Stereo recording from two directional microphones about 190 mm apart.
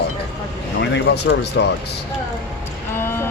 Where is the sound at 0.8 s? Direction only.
60° left (ahead or behind).